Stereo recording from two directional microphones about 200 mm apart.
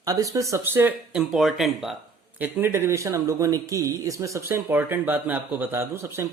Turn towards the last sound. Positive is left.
turn(degrees=-10)  # may be behind; listen again after turning